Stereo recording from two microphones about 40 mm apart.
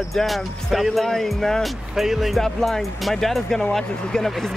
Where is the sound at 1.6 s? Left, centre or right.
Centre.